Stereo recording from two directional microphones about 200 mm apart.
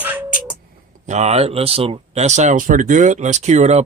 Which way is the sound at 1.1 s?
35° right (ahead or behind).